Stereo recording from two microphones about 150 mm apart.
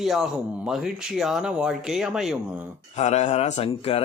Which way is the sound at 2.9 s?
50° left (ahead or behind).